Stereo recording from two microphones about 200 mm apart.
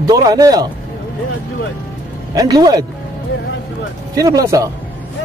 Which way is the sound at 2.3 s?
20° right (ahead or behind).